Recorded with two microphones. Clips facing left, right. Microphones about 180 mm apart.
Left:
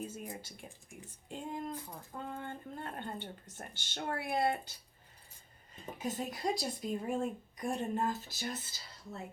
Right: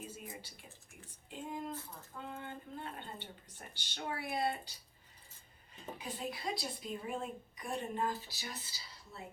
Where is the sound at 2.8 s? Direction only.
50° left (ahead or behind).